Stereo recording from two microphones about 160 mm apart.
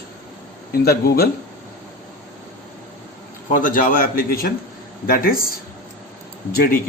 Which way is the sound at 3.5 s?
55° left (ahead or behind).